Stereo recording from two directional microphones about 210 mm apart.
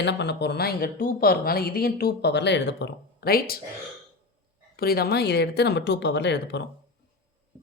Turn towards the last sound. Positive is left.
turn(degrees=55)  # may be behind; listen again after turning